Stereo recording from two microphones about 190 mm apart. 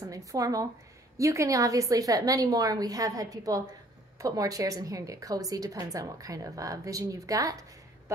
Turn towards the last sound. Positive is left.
turn(degrees=-15)  # may be behind; listen again after turning